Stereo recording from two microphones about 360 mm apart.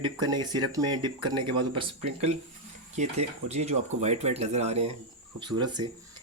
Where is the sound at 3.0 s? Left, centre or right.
Centre.